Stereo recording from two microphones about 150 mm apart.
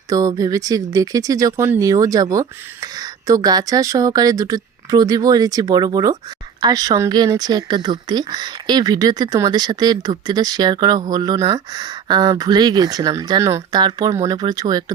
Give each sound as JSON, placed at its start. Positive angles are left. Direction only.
{"t": 0.1, "sound": "speech", "side_deg": -25}